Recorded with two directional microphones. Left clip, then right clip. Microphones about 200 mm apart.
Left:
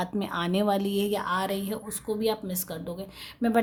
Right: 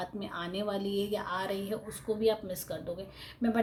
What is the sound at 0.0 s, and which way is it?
A woman's voice, 45° left (ahead or behind).